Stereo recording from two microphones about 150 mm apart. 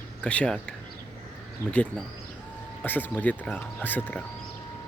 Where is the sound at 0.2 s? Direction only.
10° left (ahead or behind).